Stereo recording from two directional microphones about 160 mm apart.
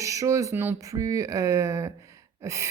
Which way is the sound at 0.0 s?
20° right (ahead or behind).